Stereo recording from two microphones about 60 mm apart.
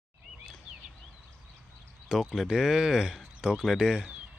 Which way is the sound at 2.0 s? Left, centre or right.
Centre.